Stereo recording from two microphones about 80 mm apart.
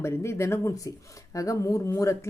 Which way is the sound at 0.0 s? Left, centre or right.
Left.